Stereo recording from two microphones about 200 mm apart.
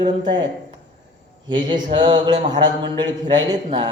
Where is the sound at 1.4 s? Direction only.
25° right (ahead or behind).